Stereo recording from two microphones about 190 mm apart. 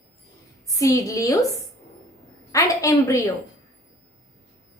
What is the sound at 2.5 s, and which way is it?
Speech, 15° left (ahead or behind).